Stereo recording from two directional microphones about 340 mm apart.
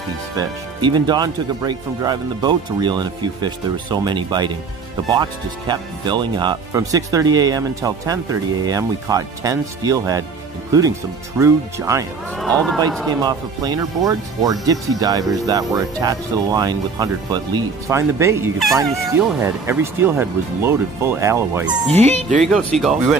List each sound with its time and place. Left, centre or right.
0.4 s speech: centre
11.3 s speech: centre
13.2 s speech: centre
21.8 s speech: centre
22.4 s speech: centre